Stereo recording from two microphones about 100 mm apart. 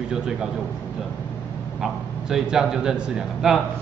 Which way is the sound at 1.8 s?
5° right (ahead or behind).